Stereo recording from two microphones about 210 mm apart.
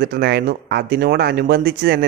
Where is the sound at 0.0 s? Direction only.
50° right (ahead or behind).